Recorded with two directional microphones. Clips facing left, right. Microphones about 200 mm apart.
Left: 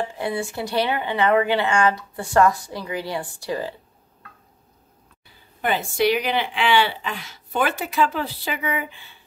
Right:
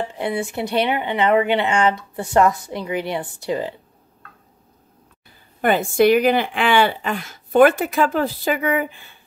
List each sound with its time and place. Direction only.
0.1 s speech: 20° right (ahead or behind)
5.6 s speech: 50° right (ahead or behind)